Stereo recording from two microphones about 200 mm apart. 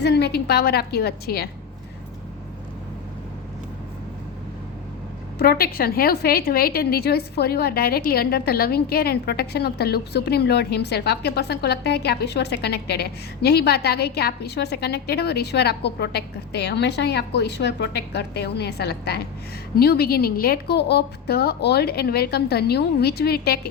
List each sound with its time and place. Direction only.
0.0 s a woman's voice: 55° left (ahead or behind)
5.4 s a woman's voice: 50° left (ahead or behind)